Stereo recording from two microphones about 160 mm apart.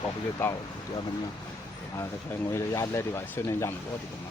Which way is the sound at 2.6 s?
20° left (ahead or behind).